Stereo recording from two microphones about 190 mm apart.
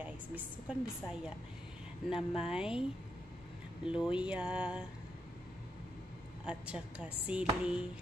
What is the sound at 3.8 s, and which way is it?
Speech, 5° right (ahead or behind).